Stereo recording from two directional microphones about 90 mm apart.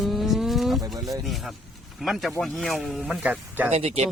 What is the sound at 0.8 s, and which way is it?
Speech, 45° right (ahead or behind).